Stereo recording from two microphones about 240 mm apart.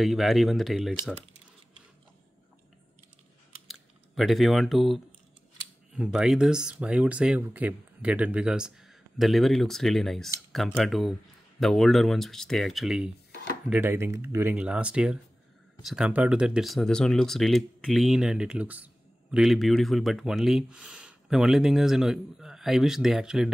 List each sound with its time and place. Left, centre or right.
0.0 s speech: centre
3.6 s computer keyboard: centre
5.9 s speech: centre
13.3 s chopping: left
13.7 s speech: centre